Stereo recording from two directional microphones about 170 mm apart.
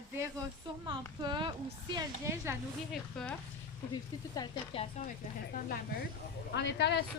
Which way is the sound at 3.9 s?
25° left (ahead or behind).